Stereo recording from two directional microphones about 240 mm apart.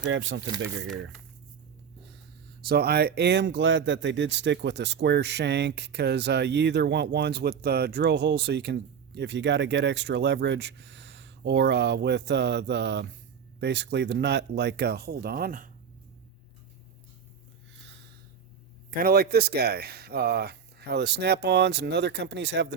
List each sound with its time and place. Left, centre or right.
0.0 s speech: right
2.6 s speech: right
18.9 s speech: right